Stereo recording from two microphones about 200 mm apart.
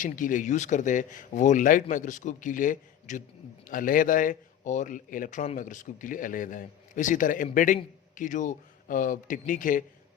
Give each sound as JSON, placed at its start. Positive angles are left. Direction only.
{"t": 0.0, "sound": "a man's voice", "side_deg": 40}